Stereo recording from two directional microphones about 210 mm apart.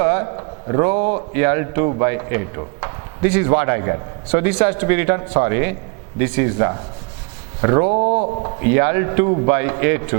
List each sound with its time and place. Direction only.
0.0 s a sound: 15° right (ahead or behind)
0.3 s a man's voice: 20° right (ahead or behind)
7.9 s speech: 35° right (ahead or behind)
8.6 s a man's voice: 15° right (ahead or behind)